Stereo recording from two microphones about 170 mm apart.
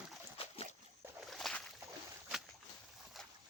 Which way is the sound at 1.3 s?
Centre (ahead or behind).